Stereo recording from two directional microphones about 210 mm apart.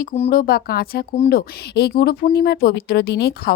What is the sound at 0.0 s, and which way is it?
Speech, 40° left (ahead or behind).